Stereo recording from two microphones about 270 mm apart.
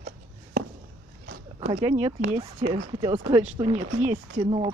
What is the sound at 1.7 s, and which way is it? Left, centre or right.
A woman's voice, centre.